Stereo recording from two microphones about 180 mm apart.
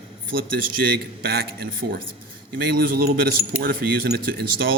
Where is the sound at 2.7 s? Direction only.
55° right (ahead or behind).